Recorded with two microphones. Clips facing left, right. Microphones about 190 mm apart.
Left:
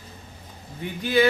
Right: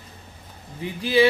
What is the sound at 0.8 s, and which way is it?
Speech, 30° right (ahead or behind).